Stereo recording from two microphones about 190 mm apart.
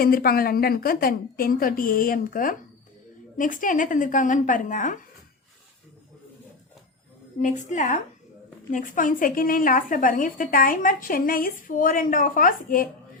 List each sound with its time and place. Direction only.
0.0 s a woman's voice: 50° left (ahead or behind)
7.4 s a woman's voice: 40° left (ahead or behind)